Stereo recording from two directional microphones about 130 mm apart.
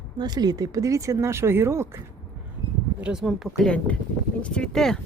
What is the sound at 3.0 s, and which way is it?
Speech, 5° right (ahead or behind).